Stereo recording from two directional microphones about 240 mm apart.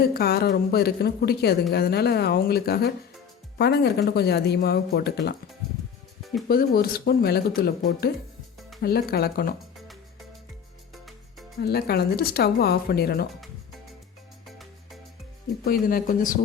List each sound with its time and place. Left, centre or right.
0.0 s speech: left
6.5 s speech: left
9.7 s music: centre
11.6 s speech: left
14.4 s music: centre
15.6 s speech: left